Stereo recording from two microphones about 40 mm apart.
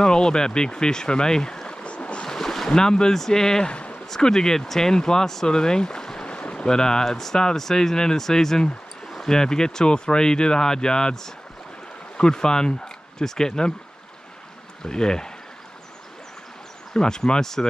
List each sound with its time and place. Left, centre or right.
0.0 s speech: centre
2.2 s speech: centre
3.7 s a sound: left
4.2 s speech: centre
12.2 s speech: centre
14.8 s speech: centre
16.9 s speech: centre